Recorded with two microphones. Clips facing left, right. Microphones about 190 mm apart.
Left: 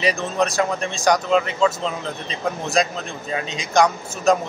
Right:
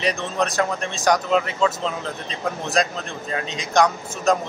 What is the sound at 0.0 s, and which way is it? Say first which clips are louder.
A man's voice: left 2 dB; centre (ahead or behind).